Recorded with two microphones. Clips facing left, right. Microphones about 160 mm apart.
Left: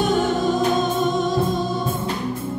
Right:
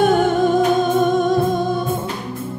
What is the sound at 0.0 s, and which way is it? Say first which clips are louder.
Music: right 5 dB; 55° right (ahead or behind).